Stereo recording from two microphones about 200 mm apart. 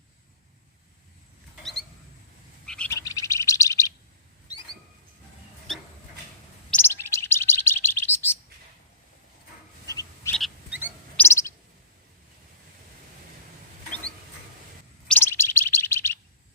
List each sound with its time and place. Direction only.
2.6 s bird: 5° left (ahead or behind)
6.7 s bird: 10° left (ahead or behind)
9.8 s bird: 15° left (ahead or behind)
10.3 s frog: centre (ahead or behind)
11.2 s bird: 15° left (ahead or behind)
15.0 s bird: 10° left (ahead or behind)